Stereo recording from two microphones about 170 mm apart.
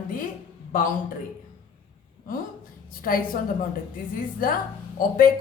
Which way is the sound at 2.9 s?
55° left (ahead or behind).